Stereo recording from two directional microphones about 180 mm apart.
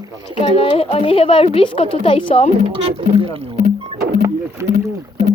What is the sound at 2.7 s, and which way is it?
Speech, 30° right (ahead or behind).